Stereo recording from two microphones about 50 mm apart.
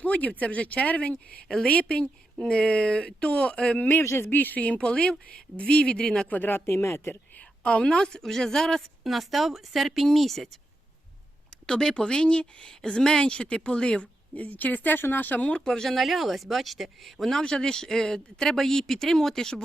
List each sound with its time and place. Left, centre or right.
0.0 s speech: left
4.0 s speech: left
4.3 s speech: left
4.6 s speech: left
6.3 s speech: left
6.7 s speech: left
7.6 s speech: left
9.0 s speech: centre
11.6 s speech: centre; by 15.4 s left
15.4 s speech: left; by 17.4 s centre
17.4 s speech: centre